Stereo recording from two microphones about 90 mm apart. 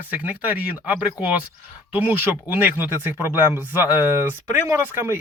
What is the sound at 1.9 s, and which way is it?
Speech, 20° right (ahead or behind).